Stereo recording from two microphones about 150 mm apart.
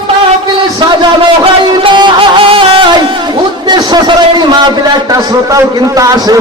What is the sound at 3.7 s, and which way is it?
A man's voice, 30° right (ahead or behind).